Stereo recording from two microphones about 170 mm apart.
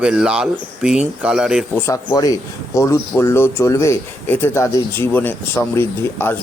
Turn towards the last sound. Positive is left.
turn(degrees=15)  # may be behind; listen again after turning